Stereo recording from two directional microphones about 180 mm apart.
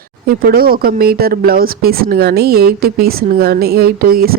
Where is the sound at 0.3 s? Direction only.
55° right (ahead or behind).